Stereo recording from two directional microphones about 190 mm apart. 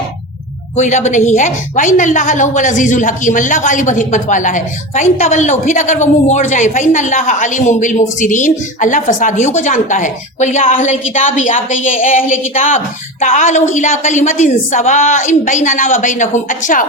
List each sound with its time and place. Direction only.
0.8 s a woman's voice: 40° left (ahead or behind)